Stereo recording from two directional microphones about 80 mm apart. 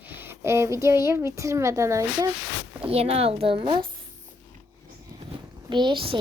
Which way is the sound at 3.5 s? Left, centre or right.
Right.